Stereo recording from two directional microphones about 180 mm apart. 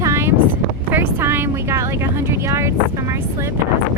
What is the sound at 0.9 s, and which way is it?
Speech, 10° right (ahead or behind).